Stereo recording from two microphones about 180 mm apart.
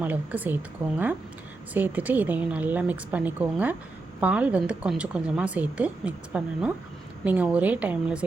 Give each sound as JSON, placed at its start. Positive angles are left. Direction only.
{"t": 0.0, "sound": "a woman's voice", "side_deg": -10}